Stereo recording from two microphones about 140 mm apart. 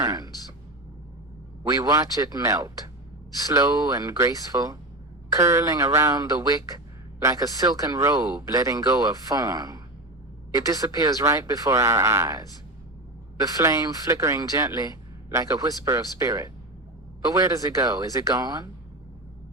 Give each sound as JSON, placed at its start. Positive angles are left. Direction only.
{"t": 0.0, "sound": "speech", "side_deg": -25}
{"t": 1.6, "sound": "speech", "side_deg": -25}
{"t": 13.6, "sound": "speech", "side_deg": -25}